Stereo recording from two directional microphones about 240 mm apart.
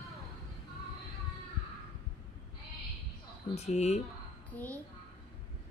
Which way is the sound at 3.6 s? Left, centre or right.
Left.